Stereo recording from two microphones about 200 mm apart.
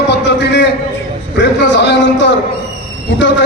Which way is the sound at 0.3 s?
60° left (ahead or behind).